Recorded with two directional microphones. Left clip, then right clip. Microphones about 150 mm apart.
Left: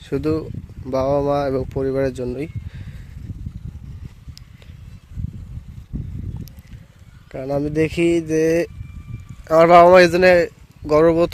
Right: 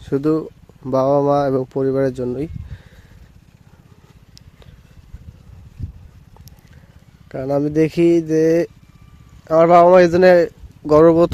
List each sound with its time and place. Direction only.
0.0 s speech: 35° right (ahead or behind)
7.3 s speech: 30° right (ahead or behind)
9.4 s speech: 10° right (ahead or behind)
10.1 s speech: 30° right (ahead or behind)